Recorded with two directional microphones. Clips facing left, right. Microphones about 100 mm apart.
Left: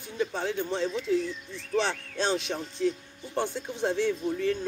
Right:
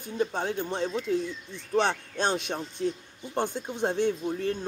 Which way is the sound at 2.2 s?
50° right (ahead or behind).